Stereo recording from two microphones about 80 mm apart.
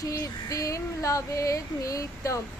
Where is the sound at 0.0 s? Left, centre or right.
Left.